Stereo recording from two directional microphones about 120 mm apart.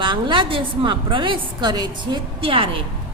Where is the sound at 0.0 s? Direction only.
45° right (ahead or behind).